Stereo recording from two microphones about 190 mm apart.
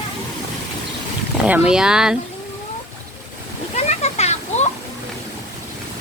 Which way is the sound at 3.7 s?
35° left (ahead or behind).